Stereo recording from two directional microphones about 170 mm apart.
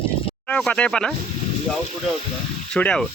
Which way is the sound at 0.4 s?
5° left (ahead or behind).